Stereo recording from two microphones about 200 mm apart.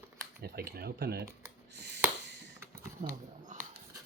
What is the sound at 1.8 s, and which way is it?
Finger snapping, 60° right (ahead or behind).